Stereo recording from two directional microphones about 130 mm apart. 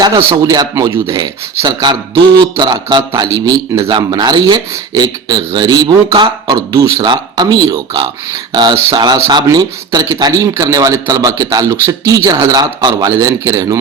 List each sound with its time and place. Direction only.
0.2 s a man's voice: 20° right (ahead or behind)
0.5 s speech: 30° right (ahead or behind)